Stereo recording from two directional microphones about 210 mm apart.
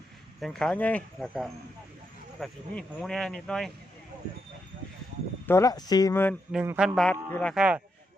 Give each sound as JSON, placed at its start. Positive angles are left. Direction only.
{"t": 0.3, "sound": "speech", "side_deg": 0}
{"t": 5.5, "sound": "speech", "side_deg": 15}
{"t": 6.5, "sound": "speech", "side_deg": -5}
{"t": 7.5, "sound": "speech", "side_deg": -5}